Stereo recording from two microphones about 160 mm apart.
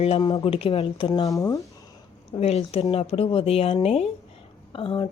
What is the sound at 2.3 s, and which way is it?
Speech, 40° left (ahead or behind).